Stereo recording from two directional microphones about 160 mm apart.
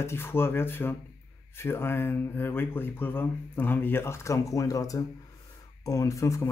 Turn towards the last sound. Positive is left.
turn(degrees=20)  # may be behind; listen again after turning